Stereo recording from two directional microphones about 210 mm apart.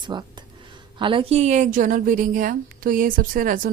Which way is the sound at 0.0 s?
20° right (ahead or behind).